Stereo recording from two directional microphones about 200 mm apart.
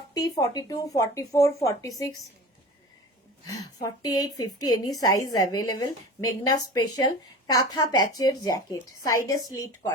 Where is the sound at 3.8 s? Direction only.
20° left (ahead or behind).